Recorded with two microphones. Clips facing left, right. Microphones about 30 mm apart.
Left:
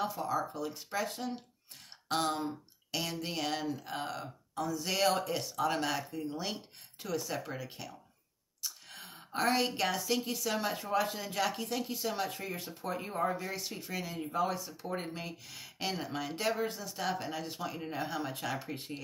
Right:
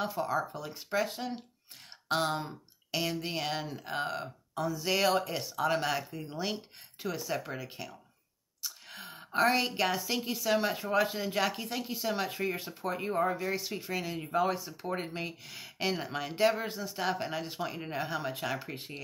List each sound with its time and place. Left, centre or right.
0.0 s speech: right